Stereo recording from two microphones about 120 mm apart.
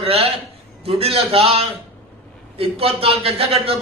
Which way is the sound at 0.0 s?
50° right (ahead or behind).